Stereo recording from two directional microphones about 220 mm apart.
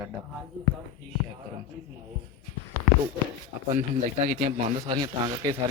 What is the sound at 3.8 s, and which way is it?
Speech, 30° right (ahead or behind).